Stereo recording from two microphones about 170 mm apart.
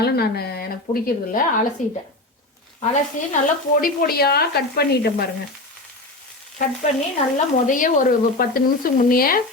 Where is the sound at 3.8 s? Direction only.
65° left (ahead or behind).